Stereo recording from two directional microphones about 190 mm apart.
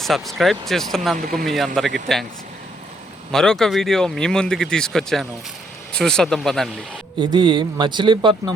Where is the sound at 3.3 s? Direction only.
5° left (ahead or behind).